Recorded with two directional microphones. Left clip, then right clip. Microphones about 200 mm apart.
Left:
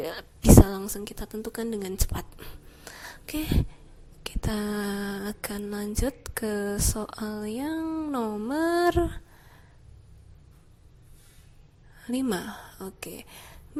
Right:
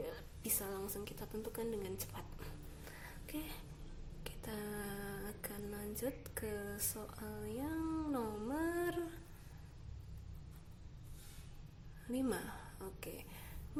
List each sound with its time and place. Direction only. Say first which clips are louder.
0.0 s a woman's voice: left 17 dB; 45° left (ahead or behind)
4.2 s a sound: left 14 dB; 45° left (ahead or behind)
12.0 s speech: left 11 dB; 40° left (ahead or behind)